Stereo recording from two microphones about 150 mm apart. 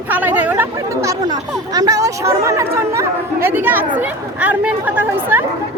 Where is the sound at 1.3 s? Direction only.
25° right (ahead or behind).